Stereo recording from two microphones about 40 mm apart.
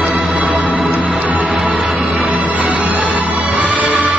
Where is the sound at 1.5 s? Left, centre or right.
Centre.